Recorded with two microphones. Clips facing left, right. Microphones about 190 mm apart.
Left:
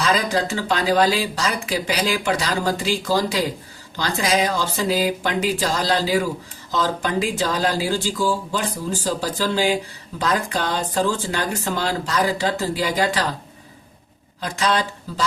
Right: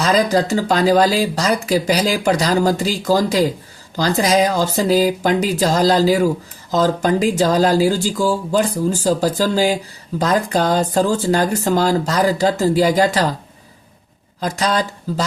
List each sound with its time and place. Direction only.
0.0 s speech: 40° right (ahead or behind)
14.4 s speech: 40° right (ahead or behind)